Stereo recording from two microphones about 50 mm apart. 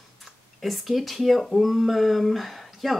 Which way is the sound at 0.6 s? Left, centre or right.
Centre.